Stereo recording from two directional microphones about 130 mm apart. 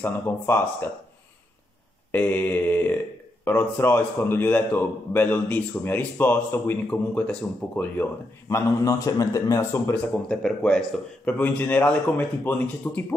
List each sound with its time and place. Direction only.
0.0 s a man's voice: 15° left (ahead or behind)
2.1 s a man's voice: 15° left (ahead or behind)
8.5 s a man's voice: 25° left (ahead or behind)
9.9 s a man's voice: 10° left (ahead or behind)